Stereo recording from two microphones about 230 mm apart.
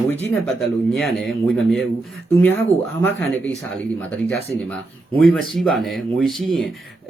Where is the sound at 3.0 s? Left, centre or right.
Centre.